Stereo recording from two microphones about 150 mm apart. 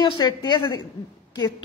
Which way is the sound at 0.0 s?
30° left (ahead or behind).